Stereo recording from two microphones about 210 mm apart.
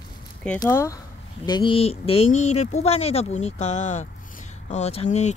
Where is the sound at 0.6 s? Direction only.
15° left (ahead or behind).